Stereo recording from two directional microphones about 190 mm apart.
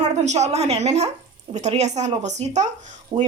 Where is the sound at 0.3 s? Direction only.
35° right (ahead or behind).